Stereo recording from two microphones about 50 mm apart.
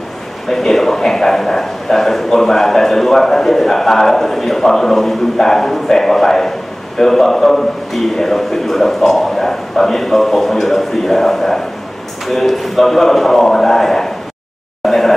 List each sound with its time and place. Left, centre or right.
0.5 s a man's voice: centre